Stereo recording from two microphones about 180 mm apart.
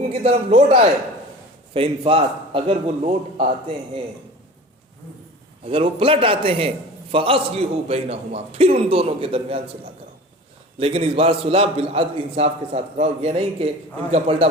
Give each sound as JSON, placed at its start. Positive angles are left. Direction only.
{"t": 0.1, "sound": "a man's voice", "side_deg": -35}
{"t": 5.6, "sound": "a man's voice", "side_deg": -30}
{"t": 10.8, "sound": "a man's voice", "side_deg": -30}